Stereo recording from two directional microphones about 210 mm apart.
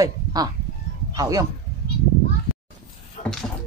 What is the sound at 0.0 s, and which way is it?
Honk, 20° right (ahead or behind).